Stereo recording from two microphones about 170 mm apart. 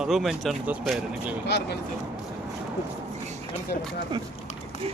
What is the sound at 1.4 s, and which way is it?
Speech, 80° left.